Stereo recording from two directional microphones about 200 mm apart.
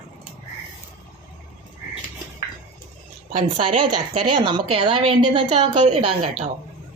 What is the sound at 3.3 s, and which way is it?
A woman's voice, 30° right (ahead or behind).